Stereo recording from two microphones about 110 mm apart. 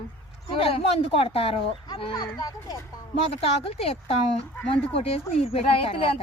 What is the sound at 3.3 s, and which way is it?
Speech, 60° left (ahead or behind).